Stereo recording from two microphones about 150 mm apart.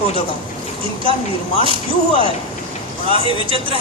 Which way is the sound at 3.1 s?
35° right (ahead or behind).